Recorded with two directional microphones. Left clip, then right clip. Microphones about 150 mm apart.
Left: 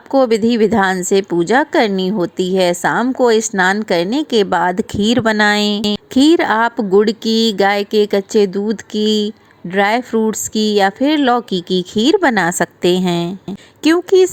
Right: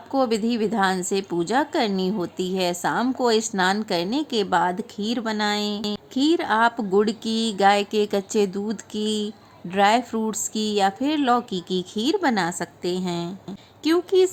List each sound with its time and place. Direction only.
0.1 s a woman's voice: 30° left (ahead or behind)